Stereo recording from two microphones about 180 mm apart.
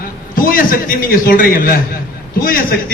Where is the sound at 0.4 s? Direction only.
50° left (ahead or behind).